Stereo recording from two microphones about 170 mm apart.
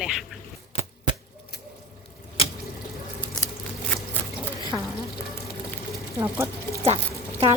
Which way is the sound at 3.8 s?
10° left (ahead or behind).